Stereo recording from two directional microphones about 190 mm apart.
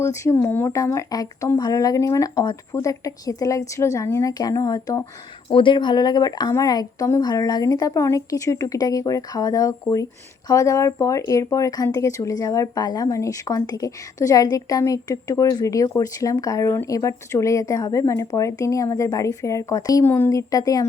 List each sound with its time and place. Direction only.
0.0 s speech: 15° left (ahead or behind)